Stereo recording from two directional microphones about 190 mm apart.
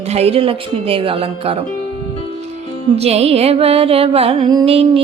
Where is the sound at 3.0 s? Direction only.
35° right (ahead or behind).